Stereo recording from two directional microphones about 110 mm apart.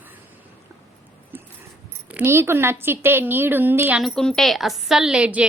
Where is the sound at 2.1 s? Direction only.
20° right (ahead or behind).